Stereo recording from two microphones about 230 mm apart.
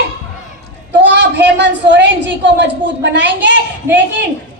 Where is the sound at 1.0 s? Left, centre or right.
Right.